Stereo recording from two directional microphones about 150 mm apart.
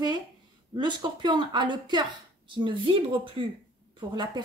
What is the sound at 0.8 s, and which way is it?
A woman's voice, 30° right (ahead or behind).